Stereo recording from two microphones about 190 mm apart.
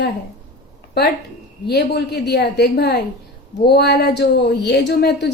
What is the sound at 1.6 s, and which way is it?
Speech, 60° left (ahead or behind).